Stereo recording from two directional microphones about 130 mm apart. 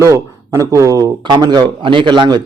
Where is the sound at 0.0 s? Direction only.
25° right (ahead or behind).